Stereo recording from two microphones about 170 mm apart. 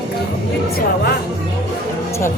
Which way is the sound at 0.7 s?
70° left (ahead or behind).